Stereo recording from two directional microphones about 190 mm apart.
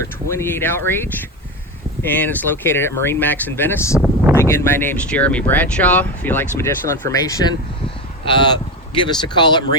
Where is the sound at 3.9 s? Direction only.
5° right (ahead or behind).